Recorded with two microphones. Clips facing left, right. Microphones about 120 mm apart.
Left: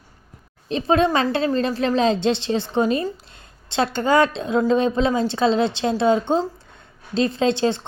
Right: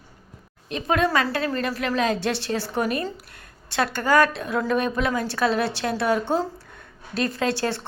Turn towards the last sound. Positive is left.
turn(degrees=20)  # may be behind; listen again after turning